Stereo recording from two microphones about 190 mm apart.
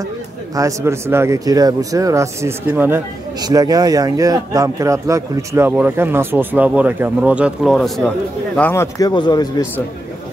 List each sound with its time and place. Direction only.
0.6 s a man's voice: 15° right (ahead or behind)
8.5 s a man's voice: 10° left (ahead or behind)